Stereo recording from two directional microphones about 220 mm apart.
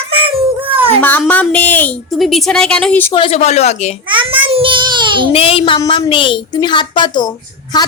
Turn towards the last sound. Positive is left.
turn(degrees=20)  # may be behind; listen again after turning